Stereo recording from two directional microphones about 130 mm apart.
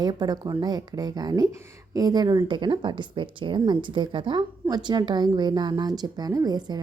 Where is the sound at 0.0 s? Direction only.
35° right (ahead or behind).